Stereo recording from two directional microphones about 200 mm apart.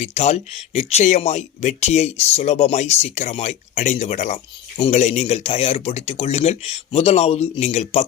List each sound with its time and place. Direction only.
0.0 s speech: 35° left (ahead or behind)